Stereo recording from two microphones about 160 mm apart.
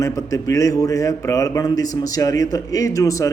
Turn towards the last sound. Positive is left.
turn(degrees=20)  # may be behind; listen again after turning